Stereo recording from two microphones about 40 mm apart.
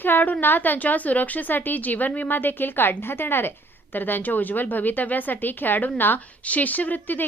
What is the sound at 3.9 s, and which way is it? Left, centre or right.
A woman's voice, left.